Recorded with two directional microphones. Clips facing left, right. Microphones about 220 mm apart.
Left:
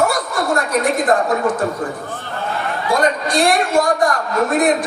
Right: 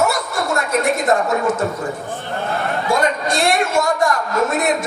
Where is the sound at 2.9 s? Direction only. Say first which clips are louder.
Left 2 dB; 25° right (ahead or behind).